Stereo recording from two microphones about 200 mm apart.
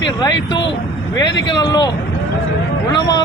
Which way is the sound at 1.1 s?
20° left (ahead or behind).